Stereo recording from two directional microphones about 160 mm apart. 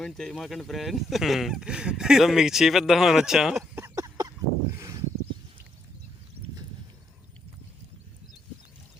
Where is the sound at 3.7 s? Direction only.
20° right (ahead or behind).